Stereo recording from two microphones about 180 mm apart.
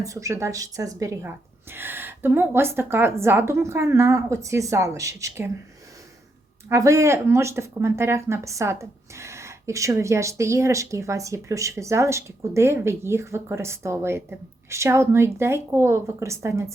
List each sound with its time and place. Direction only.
0.0 s speech: 15° right (ahead or behind)
6.7 s speech: 15° right (ahead or behind)